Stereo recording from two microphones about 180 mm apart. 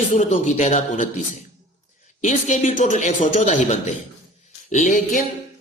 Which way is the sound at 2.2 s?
40° left (ahead or behind).